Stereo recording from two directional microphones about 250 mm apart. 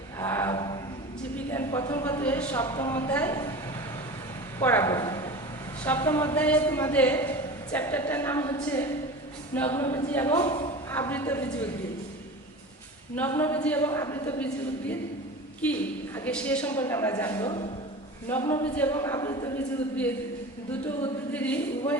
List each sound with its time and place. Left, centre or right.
0.2 s a sound: centre
4.6 s a man's voice: centre
10.3 s speech: left
10.9 s a man's voice: centre
13.1 s a man's voice: centre
16.1 s a man's voice: centre
21.3 s a man's voice: centre